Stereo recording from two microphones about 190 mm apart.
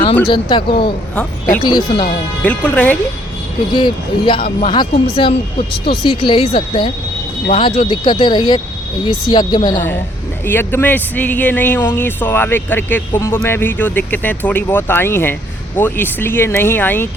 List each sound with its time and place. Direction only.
0.3 s speech: 25° left (ahead or behind)
2.4 s speech: 10° left (ahead or behind)
3.7 s speech: 25° left (ahead or behind)
10.4 s speech: 10° left (ahead or behind)